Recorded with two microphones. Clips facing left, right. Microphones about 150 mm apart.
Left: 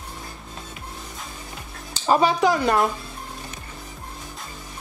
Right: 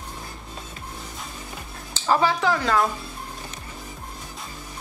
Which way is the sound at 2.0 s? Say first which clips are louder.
Left 2 dB; 20° left (ahead or behind).